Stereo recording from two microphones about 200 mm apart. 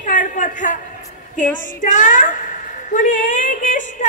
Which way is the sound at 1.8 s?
40° left (ahead or behind).